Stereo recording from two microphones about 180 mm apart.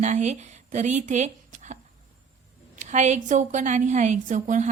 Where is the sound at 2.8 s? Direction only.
40° right (ahead or behind).